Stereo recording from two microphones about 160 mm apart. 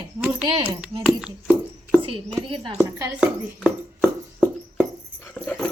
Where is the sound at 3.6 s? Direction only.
5° left (ahead or behind).